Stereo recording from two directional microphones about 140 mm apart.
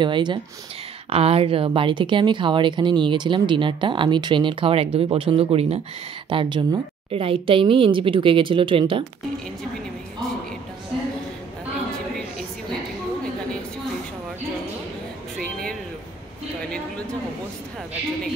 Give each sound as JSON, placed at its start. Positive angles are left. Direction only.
{"t": 0.0, "sound": "speech", "side_deg": -35}
{"t": 6.2, "sound": "speech", "side_deg": -35}